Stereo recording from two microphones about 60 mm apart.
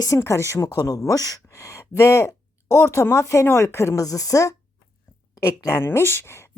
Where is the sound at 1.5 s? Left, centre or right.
Left.